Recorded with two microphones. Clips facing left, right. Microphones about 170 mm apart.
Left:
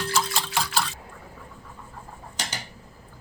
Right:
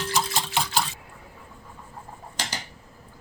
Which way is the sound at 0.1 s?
20° right (ahead or behind).